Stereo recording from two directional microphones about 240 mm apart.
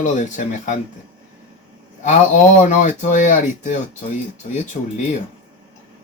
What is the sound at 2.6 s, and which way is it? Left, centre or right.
Speech, left.